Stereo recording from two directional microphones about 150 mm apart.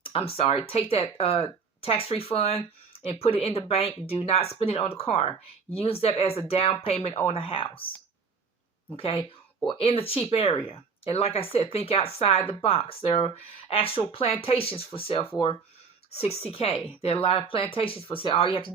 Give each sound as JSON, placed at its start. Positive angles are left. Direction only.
{"t": 0.0, "sound": "speech", "side_deg": 40}
{"t": 9.0, "sound": "speech", "side_deg": 40}